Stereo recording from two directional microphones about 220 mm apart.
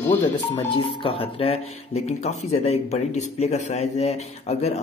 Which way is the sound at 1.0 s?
25° left (ahead or behind).